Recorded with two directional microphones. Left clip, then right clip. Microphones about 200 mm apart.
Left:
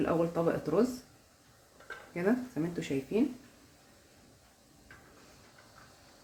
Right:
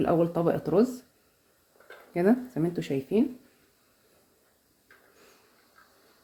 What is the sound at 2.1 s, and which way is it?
Speech, 45° right (ahead or behind).